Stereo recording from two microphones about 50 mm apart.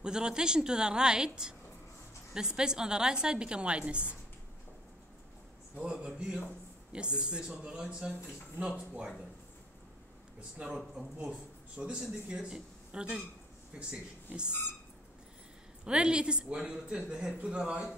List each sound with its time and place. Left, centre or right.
0.0 s a woman's voice: centre
5.9 s a woman's voice: centre
10.6 s speech: right
15.8 s speech: centre